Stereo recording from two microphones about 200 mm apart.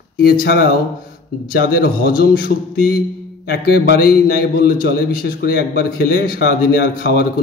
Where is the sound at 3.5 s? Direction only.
55° left (ahead or behind).